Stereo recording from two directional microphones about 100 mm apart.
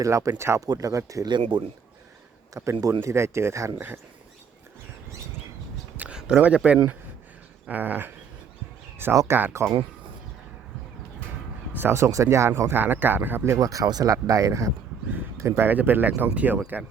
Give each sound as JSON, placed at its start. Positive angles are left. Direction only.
{"t": 0.0, "sound": "speech", "side_deg": -35}
{"t": 1.3, "sound": "speech", "side_deg": -50}
{"t": 2.5, "sound": "speech", "side_deg": -30}
{"t": 6.0, "sound": "a sound", "side_deg": -10}
{"t": 7.7, "sound": "dog", "side_deg": -15}
{"t": 9.1, "sound": "speech", "side_deg": -25}
{"t": 11.7, "sound": "speech", "side_deg": -20}